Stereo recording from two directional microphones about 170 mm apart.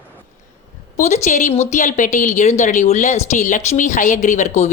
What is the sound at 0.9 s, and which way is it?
Speech, 45° left (ahead or behind).